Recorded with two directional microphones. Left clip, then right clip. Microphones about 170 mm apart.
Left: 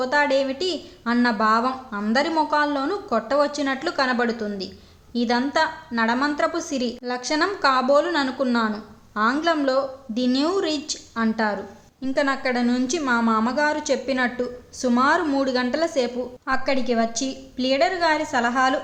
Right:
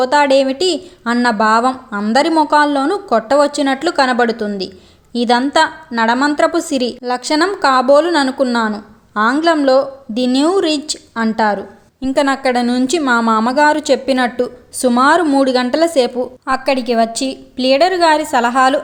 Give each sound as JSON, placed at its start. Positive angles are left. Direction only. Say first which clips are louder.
{"t": 0.0, "sound": "a woman's voice", "louder": "right 9 dB", "side_deg": -40}